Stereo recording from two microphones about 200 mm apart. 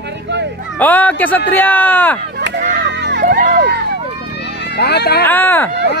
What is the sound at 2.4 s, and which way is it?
Music, 60° right (ahead or behind).